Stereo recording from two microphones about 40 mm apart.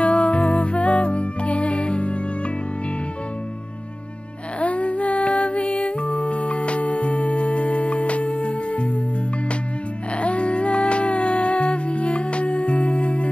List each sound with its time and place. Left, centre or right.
0.0 s music: left
4.6 s music: left
10.1 s music: left